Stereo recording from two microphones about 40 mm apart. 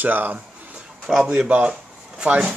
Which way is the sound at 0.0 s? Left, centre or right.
Right.